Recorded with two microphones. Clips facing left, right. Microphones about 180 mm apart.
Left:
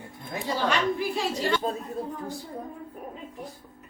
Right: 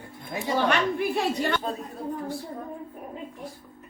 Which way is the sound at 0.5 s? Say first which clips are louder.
Right 2 dB; 60° right (ahead or behind).